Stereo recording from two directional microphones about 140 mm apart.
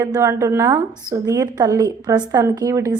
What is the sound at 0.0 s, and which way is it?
A woman's voice, 25° right (ahead or behind).